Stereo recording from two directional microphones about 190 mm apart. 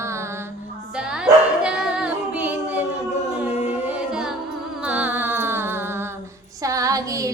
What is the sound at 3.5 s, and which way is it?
Music, 35° left (ahead or behind).